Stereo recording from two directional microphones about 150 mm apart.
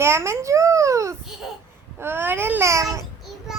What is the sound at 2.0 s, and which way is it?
Babbling, 15° right (ahead or behind).